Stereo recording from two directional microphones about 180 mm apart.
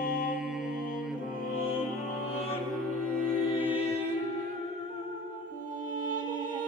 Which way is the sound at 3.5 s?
30° left (ahead or behind).